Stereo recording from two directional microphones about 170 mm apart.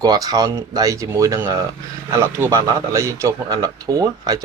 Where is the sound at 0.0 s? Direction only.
20° right (ahead or behind).